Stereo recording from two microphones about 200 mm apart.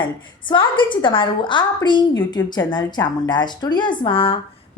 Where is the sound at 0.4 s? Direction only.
25° left (ahead or behind).